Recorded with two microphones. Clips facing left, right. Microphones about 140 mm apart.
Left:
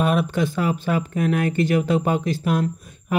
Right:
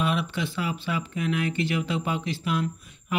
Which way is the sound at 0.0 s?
45° left (ahead or behind).